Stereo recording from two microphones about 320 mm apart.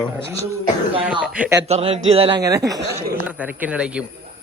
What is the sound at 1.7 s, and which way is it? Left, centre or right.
Speech, centre.